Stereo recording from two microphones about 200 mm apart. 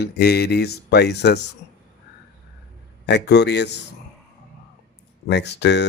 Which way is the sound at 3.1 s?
55° left (ahead or behind).